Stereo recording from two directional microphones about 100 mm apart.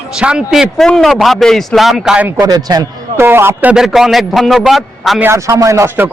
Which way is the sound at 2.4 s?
40° right (ahead or behind).